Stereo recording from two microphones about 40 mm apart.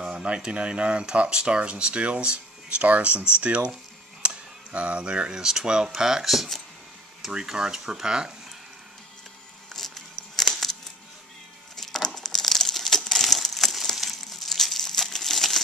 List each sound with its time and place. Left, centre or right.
0.0 s speech: right
4.2 s a sound: right
5.4 s speech: centre
6.3 s speech: centre
7.2 s speech: centre
9.7 s a sound: centre
11.7 s crumpling: centre